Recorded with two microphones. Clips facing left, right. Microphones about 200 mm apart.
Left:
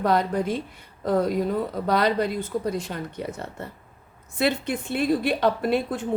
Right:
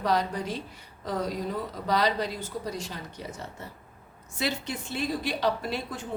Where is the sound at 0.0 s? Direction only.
55° left (ahead or behind).